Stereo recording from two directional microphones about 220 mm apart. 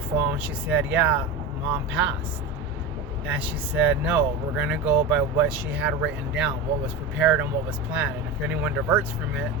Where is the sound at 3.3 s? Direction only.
5° right (ahead or behind).